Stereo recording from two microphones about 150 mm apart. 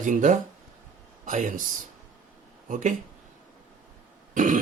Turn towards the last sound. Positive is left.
turn(degrees=-60)  # may be behind; listen again after turning